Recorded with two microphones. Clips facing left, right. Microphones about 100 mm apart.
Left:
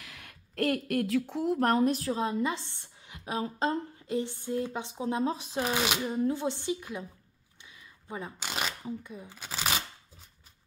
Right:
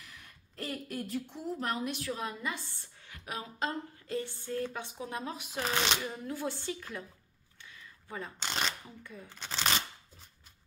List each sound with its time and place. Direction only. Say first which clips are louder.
0.0 s speech: left 4 dB; 85° left
1.6 s a woman's voice: left 10 dB; 50° left (ahead or behind); by 3.7 s 35° left (ahead or behind)
4.1 s speech: left 5 dB; 20° left (ahead or behind)
5.6 s speech: left 2 dB; 10° left (ahead or behind)
6.1 s speech: left 8 dB; 25° left (ahead or behind)
7.6 s single-lens reflex camera: left 1 dB; 15° left (ahead or behind)
8.5 s shuffling cards: even; 5° left (ahead or behind)
8.8 s speech: left 9 dB; 20° left (ahead or behind)